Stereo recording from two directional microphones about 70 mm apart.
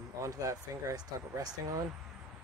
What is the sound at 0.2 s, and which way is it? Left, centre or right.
Speech, right.